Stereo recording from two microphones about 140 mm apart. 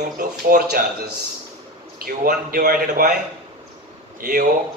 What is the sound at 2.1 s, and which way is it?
Speech, 90° right.